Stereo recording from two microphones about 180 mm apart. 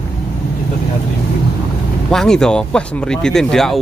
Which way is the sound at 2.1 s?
5° left (ahead or behind).